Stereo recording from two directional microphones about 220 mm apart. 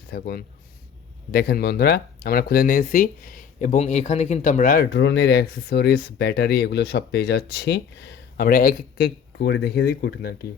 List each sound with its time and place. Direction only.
0.1 s speech: 45° left (ahead or behind)